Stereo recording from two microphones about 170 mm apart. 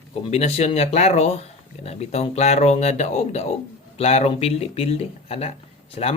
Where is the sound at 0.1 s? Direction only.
40° left (ahead or behind).